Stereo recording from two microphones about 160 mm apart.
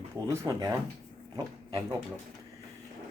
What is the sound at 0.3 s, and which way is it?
Speech, 20° right (ahead or behind).